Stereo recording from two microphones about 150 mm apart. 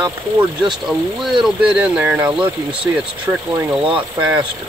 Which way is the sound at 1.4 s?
5° right (ahead or behind).